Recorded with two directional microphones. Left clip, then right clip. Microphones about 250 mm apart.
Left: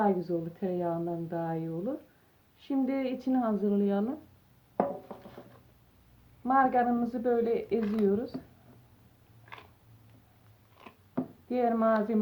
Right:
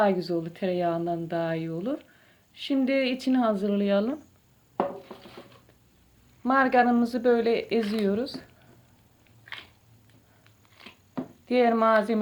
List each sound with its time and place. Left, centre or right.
0.0 s speech: right
6.4 s speech: right
11.4 s speech: right